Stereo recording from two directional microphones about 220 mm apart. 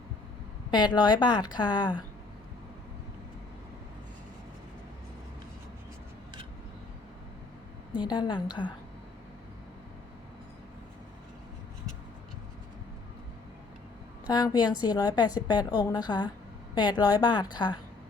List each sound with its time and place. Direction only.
0.7 s a woman's voice: 20° left (ahead or behind)
8.1 s a woman's voice: 20° left (ahead or behind)
14.3 s a woman's voice: 20° left (ahead or behind)